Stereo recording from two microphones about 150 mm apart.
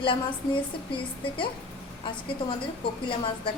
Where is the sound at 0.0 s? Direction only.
35° left (ahead or behind).